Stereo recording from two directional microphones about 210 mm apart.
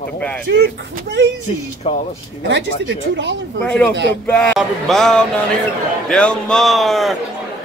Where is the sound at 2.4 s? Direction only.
60° right (ahead or behind).